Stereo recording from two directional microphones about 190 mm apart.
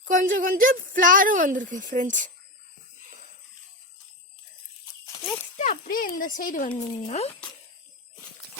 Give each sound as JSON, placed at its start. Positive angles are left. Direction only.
{"t": 0.0, "sound": "speech", "side_deg": -45}
{"t": 5.5, "sound": "speech", "side_deg": 45}